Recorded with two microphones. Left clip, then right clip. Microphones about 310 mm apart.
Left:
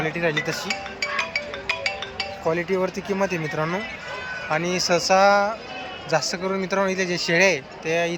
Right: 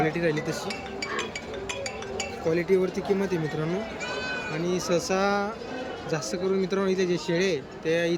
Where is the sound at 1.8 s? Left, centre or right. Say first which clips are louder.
Left 5 dB; centre.